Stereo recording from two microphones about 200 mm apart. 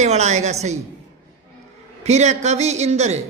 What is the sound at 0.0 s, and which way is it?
Speech, 35° right (ahead or behind).